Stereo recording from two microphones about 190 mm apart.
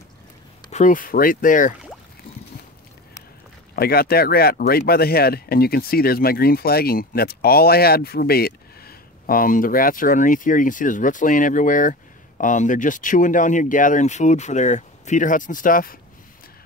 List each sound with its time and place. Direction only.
0.7 s speech: 40° left (ahead or behind)
3.7 s speech: 55° left (ahead or behind)